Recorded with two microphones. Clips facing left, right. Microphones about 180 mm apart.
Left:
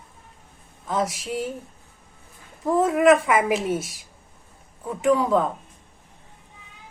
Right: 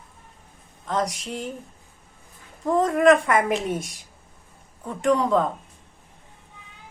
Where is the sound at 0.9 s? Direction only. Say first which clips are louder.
Left 1 dB; 5° left (ahead or behind).